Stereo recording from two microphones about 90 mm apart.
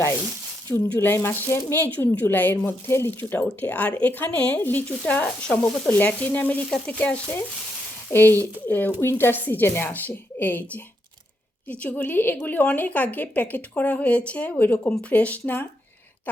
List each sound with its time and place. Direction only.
0.7 s a woman's voice: 20° left (ahead or behind)